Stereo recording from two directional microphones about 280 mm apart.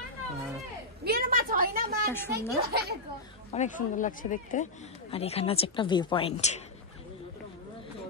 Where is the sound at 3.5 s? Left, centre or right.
Left.